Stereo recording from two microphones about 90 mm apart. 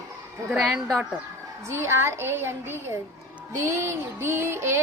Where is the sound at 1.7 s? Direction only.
30° right (ahead or behind).